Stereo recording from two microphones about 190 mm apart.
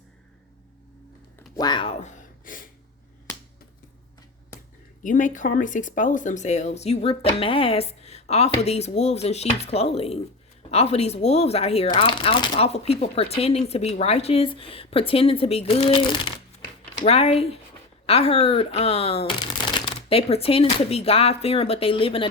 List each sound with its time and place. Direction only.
1.5 s speech: 20° left (ahead or behind)
2.0 s gasp: 40° left (ahead or behind)
5.0 s speech: 40° left (ahead or behind)